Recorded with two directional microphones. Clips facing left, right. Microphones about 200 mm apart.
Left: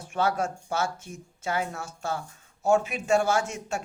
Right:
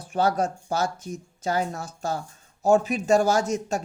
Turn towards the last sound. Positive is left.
turn(degrees=-40)  # may be behind; listen again after turning